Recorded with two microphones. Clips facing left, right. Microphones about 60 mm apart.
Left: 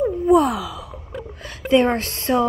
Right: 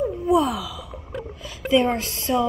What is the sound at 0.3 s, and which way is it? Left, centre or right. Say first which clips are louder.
Sigh: left 4 dB; left.